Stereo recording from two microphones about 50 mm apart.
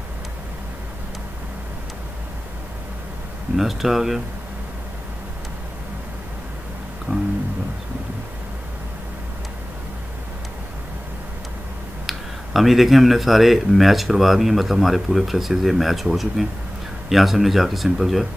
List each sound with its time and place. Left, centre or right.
3.5 s speech: centre
7.1 s music: right
12.1 s speech: centre